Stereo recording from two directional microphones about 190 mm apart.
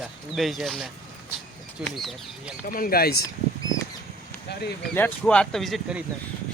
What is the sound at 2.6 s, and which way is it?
Speech, 50° left (ahead or behind).